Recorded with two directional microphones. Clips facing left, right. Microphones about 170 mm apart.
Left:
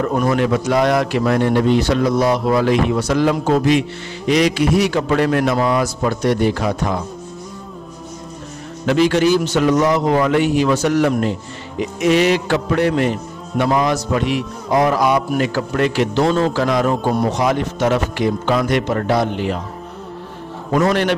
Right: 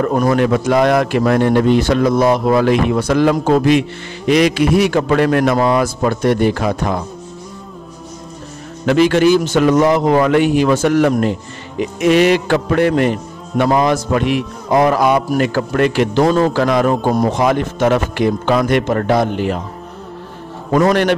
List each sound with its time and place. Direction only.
0.1 s a man's voice: 45° right (ahead or behind)
8.8 s a man's voice: 60° right (ahead or behind)
20.7 s a man's voice: 55° right (ahead or behind)